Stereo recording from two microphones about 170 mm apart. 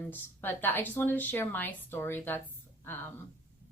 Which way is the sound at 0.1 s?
10° left (ahead or behind).